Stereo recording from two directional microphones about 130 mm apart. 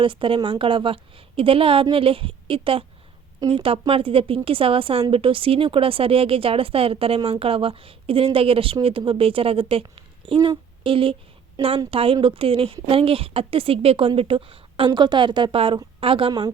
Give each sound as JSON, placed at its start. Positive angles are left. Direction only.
{"t": 0.0, "sound": "a woman's voice", "side_deg": -40}